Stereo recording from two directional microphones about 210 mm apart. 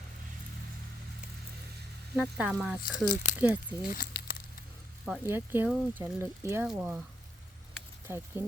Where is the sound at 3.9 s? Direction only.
45° left (ahead or behind).